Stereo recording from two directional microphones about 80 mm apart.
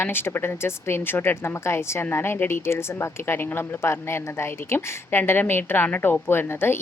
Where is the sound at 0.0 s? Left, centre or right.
Left.